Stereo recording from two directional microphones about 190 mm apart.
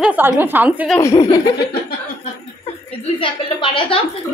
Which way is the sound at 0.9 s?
15° left (ahead or behind).